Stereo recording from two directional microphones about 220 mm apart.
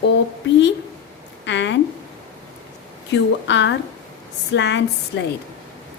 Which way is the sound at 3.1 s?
55° left (ahead or behind).